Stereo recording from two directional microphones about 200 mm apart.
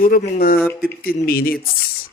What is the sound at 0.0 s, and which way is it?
Speech, 45° left (ahead or behind).